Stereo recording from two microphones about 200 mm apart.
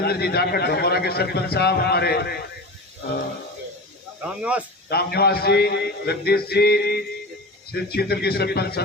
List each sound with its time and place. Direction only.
0.0 s a man's voice: 50° left (ahead or behind)
4.2 s speech: 5° right (ahead or behind)
4.9 s a man's voice: 50° left (ahead or behind)